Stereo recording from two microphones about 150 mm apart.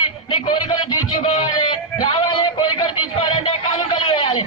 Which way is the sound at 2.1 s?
30° left (ahead or behind).